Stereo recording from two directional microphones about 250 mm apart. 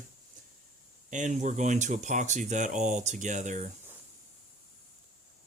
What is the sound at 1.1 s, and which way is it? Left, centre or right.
Speech, right.